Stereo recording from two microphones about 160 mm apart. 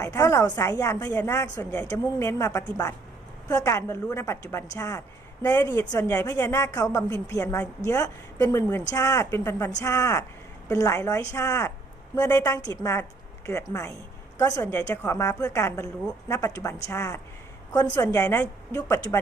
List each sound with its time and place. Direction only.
0.0 s a woman's voice: 20° left (ahead or behind)